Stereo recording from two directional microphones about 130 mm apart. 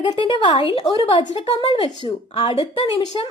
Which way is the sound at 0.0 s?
35° left (ahead or behind).